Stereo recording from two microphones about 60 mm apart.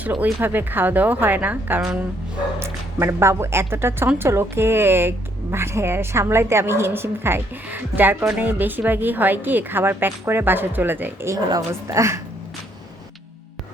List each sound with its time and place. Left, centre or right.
0.2 s speech: right
2.6 s a woman's voice: right
11.5 s a woman's voice: right